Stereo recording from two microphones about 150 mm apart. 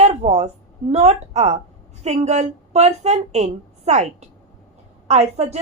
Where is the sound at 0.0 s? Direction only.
40° right (ahead or behind).